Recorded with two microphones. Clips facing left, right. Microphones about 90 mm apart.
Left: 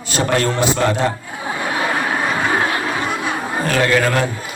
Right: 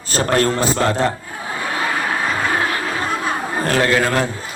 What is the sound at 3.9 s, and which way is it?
Speech, 25° right (ahead or behind).